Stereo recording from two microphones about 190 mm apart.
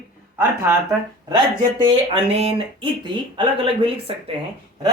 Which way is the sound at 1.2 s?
25° right (ahead or behind).